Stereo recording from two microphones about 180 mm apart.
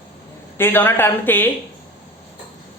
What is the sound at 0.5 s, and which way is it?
Speech, 10° left (ahead or behind).